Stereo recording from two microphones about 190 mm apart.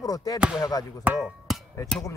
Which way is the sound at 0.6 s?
20° left (ahead or behind).